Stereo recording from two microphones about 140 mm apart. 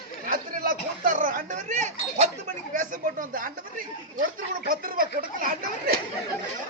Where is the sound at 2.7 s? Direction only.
70° right (ahead or behind).